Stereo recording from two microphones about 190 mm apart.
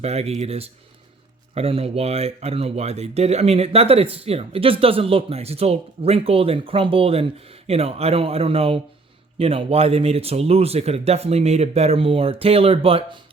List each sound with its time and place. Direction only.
0.0 s speech: 35° right (ahead or behind)